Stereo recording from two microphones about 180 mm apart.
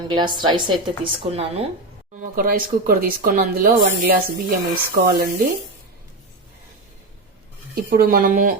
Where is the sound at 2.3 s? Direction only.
55° right (ahead or behind).